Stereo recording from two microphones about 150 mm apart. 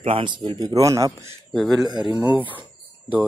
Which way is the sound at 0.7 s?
20° right (ahead or behind).